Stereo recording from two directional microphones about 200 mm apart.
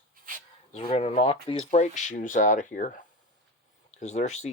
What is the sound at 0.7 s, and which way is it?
Speech, 30° left (ahead or behind).